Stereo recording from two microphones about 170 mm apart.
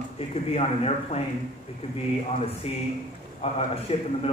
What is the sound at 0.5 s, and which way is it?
Speech, 35° left (ahead or behind).